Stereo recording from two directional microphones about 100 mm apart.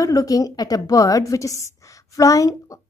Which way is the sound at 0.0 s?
35° left (ahead or behind).